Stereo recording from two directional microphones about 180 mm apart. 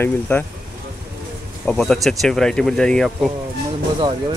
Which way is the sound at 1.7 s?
5° left (ahead or behind).